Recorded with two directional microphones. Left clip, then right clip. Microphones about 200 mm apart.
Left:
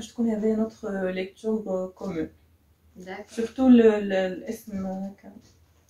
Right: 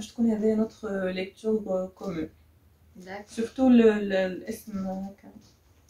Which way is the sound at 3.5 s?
25° right (ahead or behind).